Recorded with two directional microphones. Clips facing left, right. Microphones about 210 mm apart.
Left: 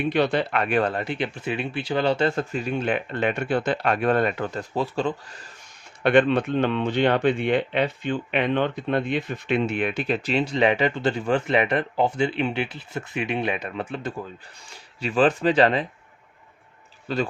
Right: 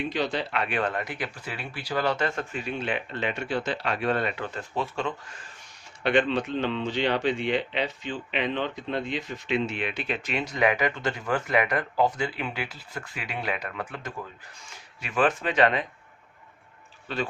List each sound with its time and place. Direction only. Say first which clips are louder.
0.1 s speech: left 6 dB; 60° left (ahead or behind); by 5.4 s 35° left (ahead or behind)
6.0 s speech: left 5 dB; 55° left (ahead or behind); by 15.9 s 35° left (ahead or behind)